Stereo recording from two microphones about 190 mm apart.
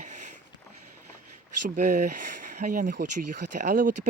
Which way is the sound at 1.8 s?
45° right (ahead or behind).